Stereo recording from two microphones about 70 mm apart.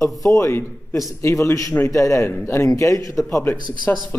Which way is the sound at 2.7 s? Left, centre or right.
Left.